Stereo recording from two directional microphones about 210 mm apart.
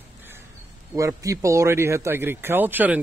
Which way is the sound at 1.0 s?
15° right (ahead or behind).